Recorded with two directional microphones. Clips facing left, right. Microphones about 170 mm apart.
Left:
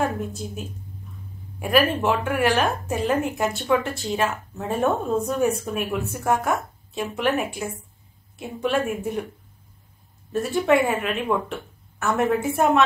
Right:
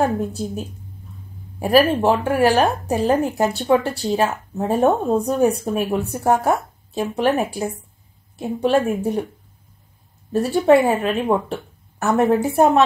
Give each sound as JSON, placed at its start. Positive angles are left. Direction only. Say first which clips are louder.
{"t": 0.0, "sound": "speech", "louder": "right 5 dB", "side_deg": -35}
{"t": 10.3, "sound": "speech", "louder": "right 5 dB", "side_deg": -35}